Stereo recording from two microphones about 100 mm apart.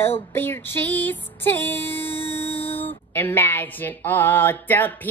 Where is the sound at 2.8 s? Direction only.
20° left (ahead or behind).